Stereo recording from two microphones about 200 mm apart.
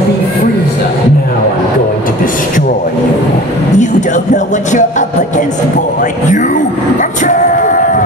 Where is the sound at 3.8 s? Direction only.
40° left (ahead or behind).